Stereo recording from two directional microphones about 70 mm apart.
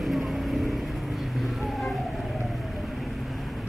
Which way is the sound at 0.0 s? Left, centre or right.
Centre.